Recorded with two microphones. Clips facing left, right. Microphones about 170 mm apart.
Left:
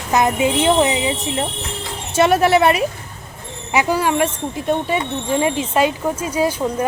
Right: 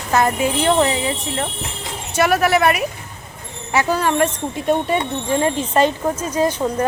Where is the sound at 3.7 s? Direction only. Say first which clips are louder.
Even; 10° left (ahead or behind).